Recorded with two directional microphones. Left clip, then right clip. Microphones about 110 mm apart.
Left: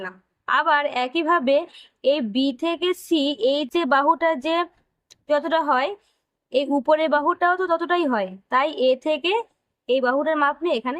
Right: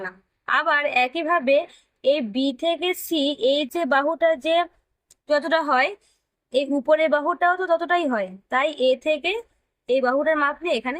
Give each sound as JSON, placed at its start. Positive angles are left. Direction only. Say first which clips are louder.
{"t": 0.0, "sound": "a woman's voice", "louder": "even", "side_deg": 35}
{"t": 6.5, "sound": "a woman's voice", "louder": "even", "side_deg": 50}
{"t": 9.8, "sound": "a woman's voice", "louder": "even", "side_deg": 40}